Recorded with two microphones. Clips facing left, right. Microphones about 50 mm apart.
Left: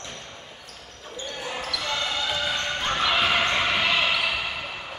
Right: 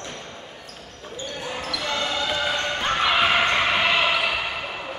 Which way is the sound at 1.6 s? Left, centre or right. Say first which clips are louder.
Right 3 dB; centre.